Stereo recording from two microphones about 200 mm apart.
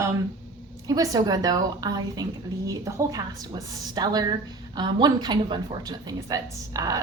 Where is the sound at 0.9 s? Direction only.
20° right (ahead or behind).